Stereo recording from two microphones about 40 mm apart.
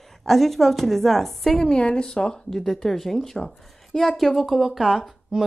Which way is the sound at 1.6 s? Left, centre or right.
Left.